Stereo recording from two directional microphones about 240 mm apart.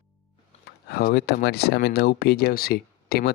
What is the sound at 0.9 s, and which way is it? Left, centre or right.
Speech, left.